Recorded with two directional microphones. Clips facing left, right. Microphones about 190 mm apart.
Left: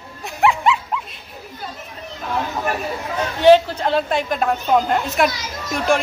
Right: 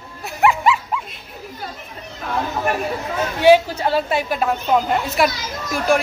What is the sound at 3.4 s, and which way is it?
A woman's voice, 10° right (ahead or behind).